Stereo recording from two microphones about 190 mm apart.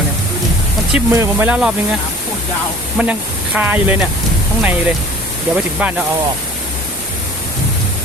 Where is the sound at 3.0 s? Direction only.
5° right (ahead or behind).